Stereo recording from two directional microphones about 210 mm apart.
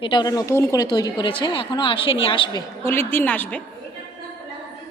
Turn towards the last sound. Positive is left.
turn(degrees=10)  # may be behind; listen again after turning